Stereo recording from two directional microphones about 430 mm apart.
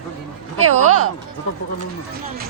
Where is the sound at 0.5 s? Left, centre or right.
Right.